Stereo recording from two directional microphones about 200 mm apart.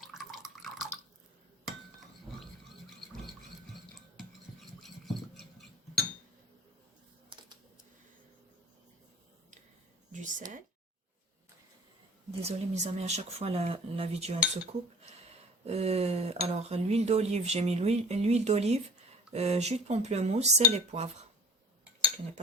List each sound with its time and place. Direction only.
0.1 s drip: centre (ahead or behind)
4.8 s a sound: centre (ahead or behind)
7.3 s typing: 20° right (ahead or behind)
10.1 s a sound: 40° right (ahead or behind)
12.4 s speech: 35° right (ahead or behind)
14.3 s cutlery: 5° right (ahead or behind)
15.6 s speech: 30° right (ahead or behind)